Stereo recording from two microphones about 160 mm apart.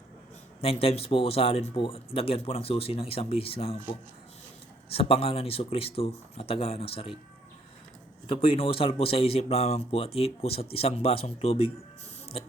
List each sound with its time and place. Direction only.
0.6 s speech: 40° left (ahead or behind)
4.9 s speech: 35° left (ahead or behind)
8.3 s speech: 35° left (ahead or behind)